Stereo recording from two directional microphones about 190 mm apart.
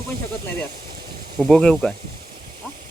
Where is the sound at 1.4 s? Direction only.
Centre (ahead or behind).